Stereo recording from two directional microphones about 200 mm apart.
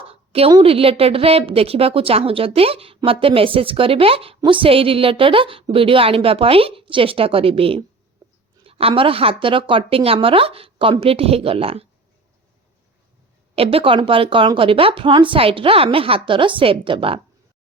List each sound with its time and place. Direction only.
0.1 s a woman's voice: 30° right (ahead or behind)
13.6 s a woman's voice: 30° right (ahead or behind)